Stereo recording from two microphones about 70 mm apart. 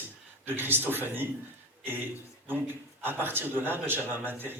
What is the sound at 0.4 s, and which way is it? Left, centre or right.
Speech, right.